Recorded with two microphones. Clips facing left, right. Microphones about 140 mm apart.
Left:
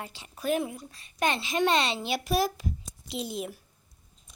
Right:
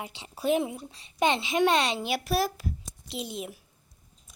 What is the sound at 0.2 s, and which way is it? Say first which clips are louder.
A woman's voice: right 3 dB; 25° right (ahead or behind).